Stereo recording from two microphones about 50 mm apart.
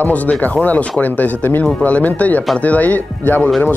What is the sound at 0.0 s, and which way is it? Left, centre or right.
Speech, left.